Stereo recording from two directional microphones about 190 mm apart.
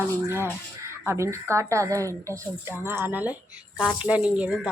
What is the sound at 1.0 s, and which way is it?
A woman's voice, 15° right (ahead or behind).